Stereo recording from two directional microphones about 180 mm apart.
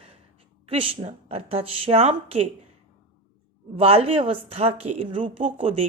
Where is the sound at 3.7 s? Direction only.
30° right (ahead or behind).